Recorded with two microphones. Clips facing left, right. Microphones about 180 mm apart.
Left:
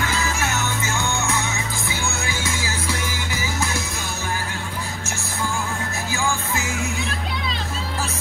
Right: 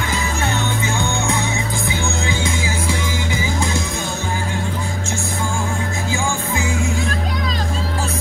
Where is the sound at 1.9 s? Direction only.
20° right (ahead or behind).